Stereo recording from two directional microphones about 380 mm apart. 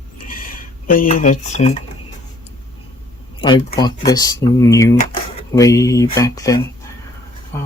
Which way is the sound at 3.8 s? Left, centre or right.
Centre.